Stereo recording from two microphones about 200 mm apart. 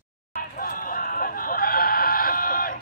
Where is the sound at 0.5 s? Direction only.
45° left (ahead or behind).